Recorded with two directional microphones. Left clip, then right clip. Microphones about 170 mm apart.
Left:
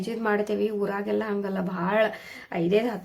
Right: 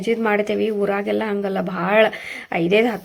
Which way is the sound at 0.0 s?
25° right (ahead or behind).